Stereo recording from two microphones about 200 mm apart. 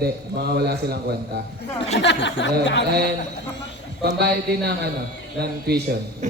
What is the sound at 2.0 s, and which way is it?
Speech, 65° left (ahead or behind).